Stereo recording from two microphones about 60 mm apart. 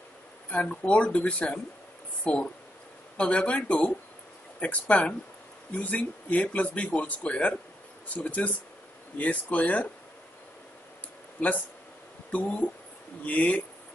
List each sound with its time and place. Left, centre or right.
0.5 s speech: left
12.3 s speech: left